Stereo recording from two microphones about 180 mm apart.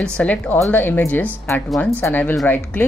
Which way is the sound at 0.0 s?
5° left (ahead or behind).